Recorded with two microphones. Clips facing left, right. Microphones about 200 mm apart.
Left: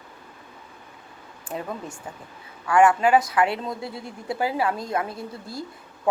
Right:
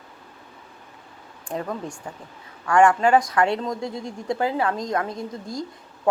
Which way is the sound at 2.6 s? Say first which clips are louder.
Right 1 dB; 5° left (ahead or behind).